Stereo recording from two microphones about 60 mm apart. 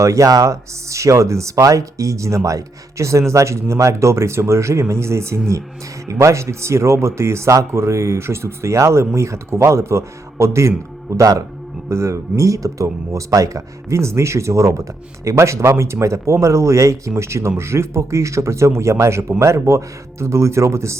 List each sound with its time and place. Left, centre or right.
0.0 s a man's voice: right
11.9 s speech: right